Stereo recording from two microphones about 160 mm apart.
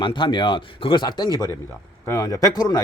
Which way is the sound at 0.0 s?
30° left (ahead or behind).